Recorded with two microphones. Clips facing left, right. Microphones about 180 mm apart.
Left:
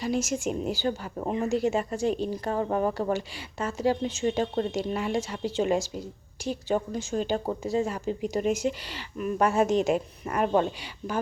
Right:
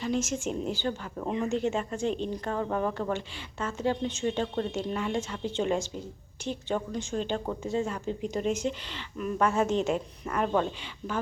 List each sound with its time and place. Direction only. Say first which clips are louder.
0.0 s speech: left 2 dB; 10° left (ahead or behind)
2.6 s speech: left 3 dB; 20° left (ahead or behind)